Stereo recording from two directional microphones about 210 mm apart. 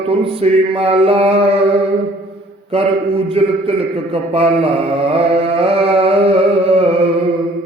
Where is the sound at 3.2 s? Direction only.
25° right (ahead or behind).